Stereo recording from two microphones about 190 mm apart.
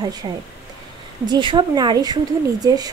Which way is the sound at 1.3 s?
25° right (ahead or behind).